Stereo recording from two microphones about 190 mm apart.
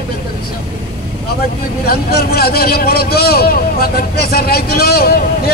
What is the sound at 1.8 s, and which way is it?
A man's voice, 55° left (ahead or behind).